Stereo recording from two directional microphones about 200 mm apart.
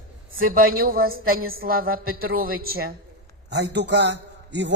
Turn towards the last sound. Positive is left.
turn(degrees=-60)  # may be behind; listen again after turning